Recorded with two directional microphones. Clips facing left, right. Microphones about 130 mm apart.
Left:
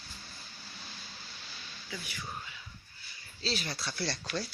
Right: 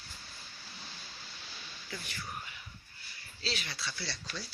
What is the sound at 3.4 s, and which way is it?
Speech, 35° left (ahead or behind).